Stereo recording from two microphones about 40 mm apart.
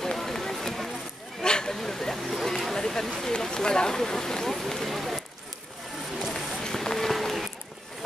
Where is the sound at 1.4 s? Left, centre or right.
Left.